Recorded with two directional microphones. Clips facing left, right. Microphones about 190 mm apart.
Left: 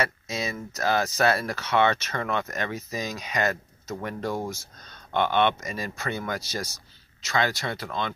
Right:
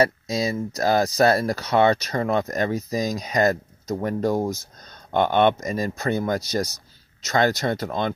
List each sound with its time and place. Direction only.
0.0 s speech: 35° right (ahead or behind)